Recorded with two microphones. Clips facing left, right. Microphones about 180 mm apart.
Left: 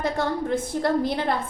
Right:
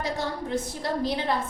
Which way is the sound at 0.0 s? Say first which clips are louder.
Left 5 dB; 55° left (ahead or behind).